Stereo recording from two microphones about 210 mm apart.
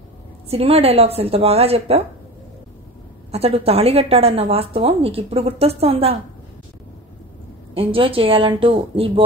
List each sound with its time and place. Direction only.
0.5 s a woman's voice: 30° right (ahead or behind)
3.3 s a woman's voice: 30° right (ahead or behind)
7.7 s a woman's voice: 25° right (ahead or behind)